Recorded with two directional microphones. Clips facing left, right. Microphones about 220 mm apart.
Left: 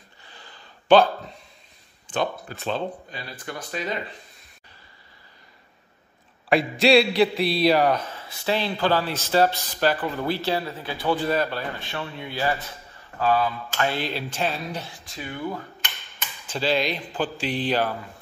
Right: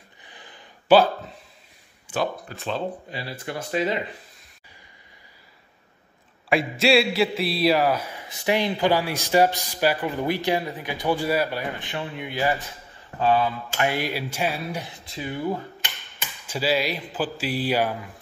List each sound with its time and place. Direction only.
0.2 s a sound: 15° right (ahead or behind)
0.8 s speech: 5° right (ahead or behind)
3.1 s speech: 25° right (ahead or behind)
6.5 s a man's voice: centre (ahead or behind)
15.1 s speech: 25° right (ahead or behind)
16.2 s a man's voice: 10° right (ahead or behind)